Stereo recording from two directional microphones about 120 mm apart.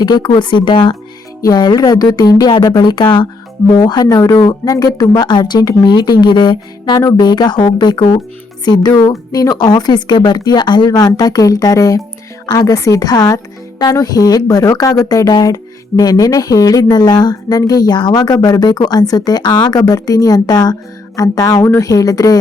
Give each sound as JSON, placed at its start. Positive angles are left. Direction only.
{"t": 0.0, "sound": "speech", "side_deg": 35}